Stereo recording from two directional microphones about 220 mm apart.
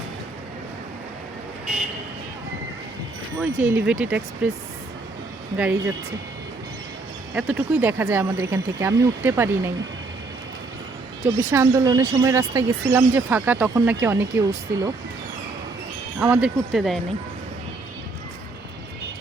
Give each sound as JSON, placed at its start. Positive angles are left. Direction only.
{"t": 3.4, "sound": "speech", "side_deg": -10}
{"t": 7.3, "sound": "speech", "side_deg": -5}
{"t": 11.2, "sound": "speech", "side_deg": -35}
{"t": 11.5, "sound": "speech", "side_deg": -15}
{"t": 16.1, "sound": "speech", "side_deg": -5}